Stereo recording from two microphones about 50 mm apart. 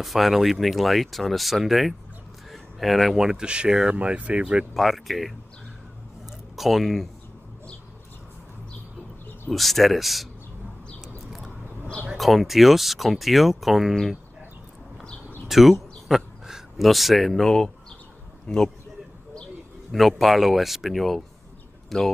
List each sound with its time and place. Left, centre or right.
0.0 s speech: centre
2.5 s a sound: centre
3.2 s speech: centre
4.7 s speech: centre
6.5 s speech: centre
9.5 s speech: centre
12.2 s speech: centre
15.4 s a sound: centre
16.8 s a man's voice: centre
19.9 s speech: centre